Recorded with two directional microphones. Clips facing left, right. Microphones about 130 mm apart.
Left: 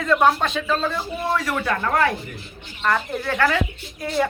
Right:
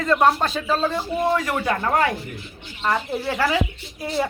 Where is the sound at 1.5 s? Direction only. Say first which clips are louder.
Right 1 dB; 35° right (ahead or behind).